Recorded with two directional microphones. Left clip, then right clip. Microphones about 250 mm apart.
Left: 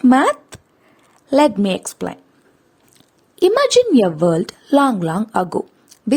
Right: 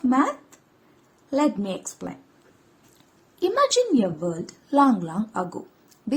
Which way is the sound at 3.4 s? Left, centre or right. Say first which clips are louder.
Left 8 dB; left.